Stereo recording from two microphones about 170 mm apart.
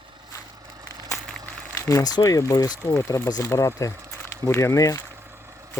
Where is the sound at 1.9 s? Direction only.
20° left (ahead or behind).